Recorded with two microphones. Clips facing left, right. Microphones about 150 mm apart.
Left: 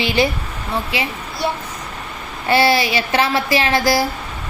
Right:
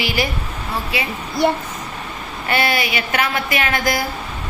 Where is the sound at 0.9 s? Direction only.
25° left (ahead or behind).